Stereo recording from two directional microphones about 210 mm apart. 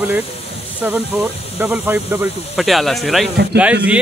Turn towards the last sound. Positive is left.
turn(degrees=-5)  # may be behind; listen again after turning